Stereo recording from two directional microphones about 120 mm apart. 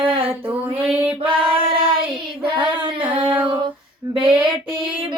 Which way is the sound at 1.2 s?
45° right (ahead or behind).